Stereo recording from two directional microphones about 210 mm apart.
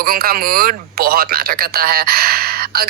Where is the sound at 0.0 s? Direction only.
45° right (ahead or behind).